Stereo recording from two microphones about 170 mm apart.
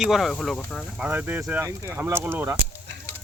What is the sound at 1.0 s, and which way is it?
Speech, 10° right (ahead or behind).